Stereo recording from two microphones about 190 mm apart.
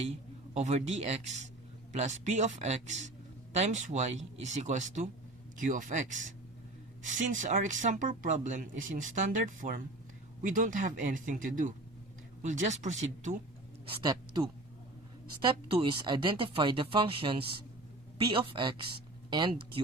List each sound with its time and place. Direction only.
0.0 s speech: 35° right (ahead or behind)
13.9 s speech: 20° right (ahead or behind)